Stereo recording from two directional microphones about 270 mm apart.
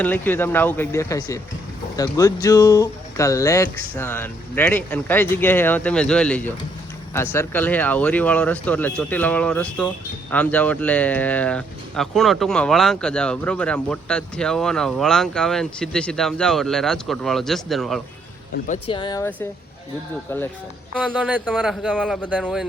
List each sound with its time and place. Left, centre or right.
0.0 s speech: centre
18.7 s speech: centre
20.9 s speech: centre